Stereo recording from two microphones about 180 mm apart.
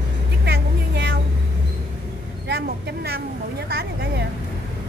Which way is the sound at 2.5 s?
65° right (ahead or behind).